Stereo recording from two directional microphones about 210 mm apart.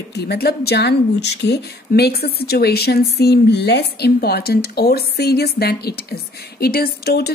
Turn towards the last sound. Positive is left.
turn(degrees=50)  # may be behind; listen again after turning